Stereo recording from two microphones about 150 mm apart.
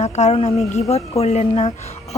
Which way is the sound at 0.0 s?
50° left (ahead or behind).